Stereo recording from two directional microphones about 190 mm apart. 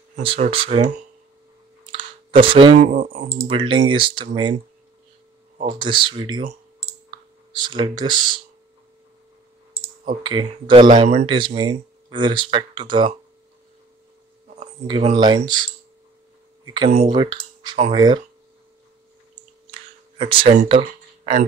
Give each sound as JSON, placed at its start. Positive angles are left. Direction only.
{"t": 0.1, "sound": "speech", "side_deg": -30}
{"t": 1.9, "sound": "a sound", "side_deg": -30}
{"t": 2.8, "sound": "speech", "side_deg": -40}
{"t": 5.8, "sound": "speech", "side_deg": -25}
{"t": 7.1, "sound": "clicking", "side_deg": -25}
{"t": 10.2, "sound": "speech", "side_deg": -25}
{"t": 11.3, "sound": "speech", "side_deg": -25}
{"t": 14.9, "sound": "speech", "side_deg": -25}
{"t": 16.6, "sound": "speech", "side_deg": -25}
{"t": 20.2, "sound": "speech", "side_deg": -25}
{"t": 21.2, "sound": "a sound", "side_deg": -40}